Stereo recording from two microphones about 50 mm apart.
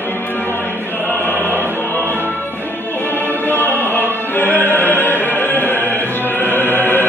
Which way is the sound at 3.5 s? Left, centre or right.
Left.